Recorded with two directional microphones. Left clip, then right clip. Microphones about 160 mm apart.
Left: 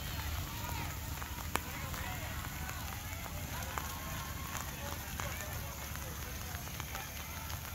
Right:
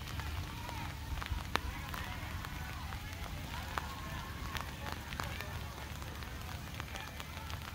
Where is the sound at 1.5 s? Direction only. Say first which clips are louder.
Right 1 dB; 10° right (ahead or behind).